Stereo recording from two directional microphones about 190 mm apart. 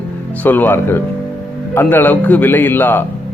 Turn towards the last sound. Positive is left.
turn(degrees=10)  # may be behind; listen again after turning